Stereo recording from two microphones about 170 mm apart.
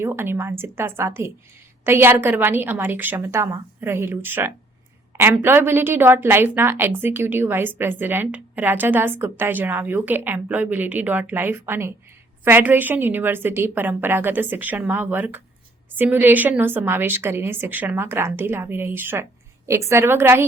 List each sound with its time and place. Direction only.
0.0 s a woman's voice: 15° right (ahead or behind)